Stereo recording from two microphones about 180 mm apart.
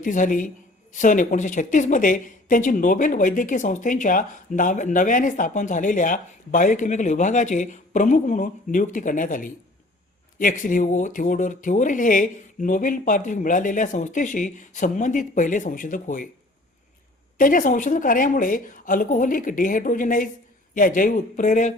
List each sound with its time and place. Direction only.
0.0 s a woman's voice: 45° left (ahead or behind)
17.3 s a woman's voice: 50° left (ahead or behind)